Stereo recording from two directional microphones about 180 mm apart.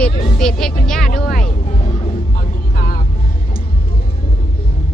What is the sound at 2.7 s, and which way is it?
Vehicle, 55° left (ahead or behind).